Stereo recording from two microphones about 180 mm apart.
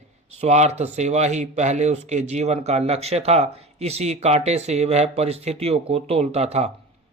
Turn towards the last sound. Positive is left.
turn(degrees=-35)  # may be behind; listen again after turning